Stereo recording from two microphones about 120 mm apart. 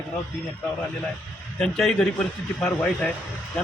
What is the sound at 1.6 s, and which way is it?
A man's voice, 5° left (ahead or behind).